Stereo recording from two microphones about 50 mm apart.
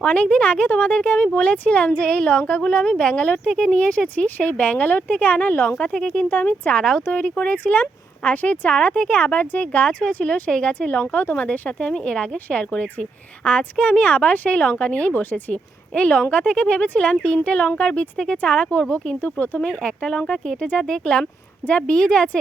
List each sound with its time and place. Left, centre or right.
0.0 s speech: left
3.4 s speech: centre; by 5.7 s left
5.7 s speech: left
6.3 s speech: left
6.7 s speech: centre
7.1 s speech: left
8.7 s speech: centre
10.5 s speech: left
10.8 s speech: left
15.1 s speech: left
16.0 s speech: left
19.8 s speech: left